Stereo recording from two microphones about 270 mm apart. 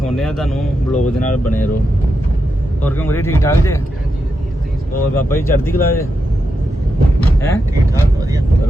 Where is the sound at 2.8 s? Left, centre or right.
Centre.